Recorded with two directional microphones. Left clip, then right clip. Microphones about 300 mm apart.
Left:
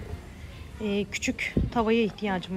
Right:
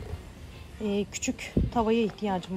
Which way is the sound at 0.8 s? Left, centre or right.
Centre.